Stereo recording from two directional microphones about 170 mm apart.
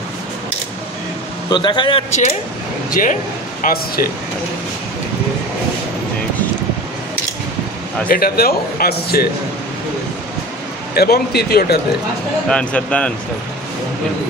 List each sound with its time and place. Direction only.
1.5 s a man's voice: 25° left (ahead or behind)
2.9 s speech: 55° left (ahead or behind)
8.1 s speech: 60° left (ahead or behind)
11.0 s speech: 70° left (ahead or behind)
12.4 s speech: 5° left (ahead or behind)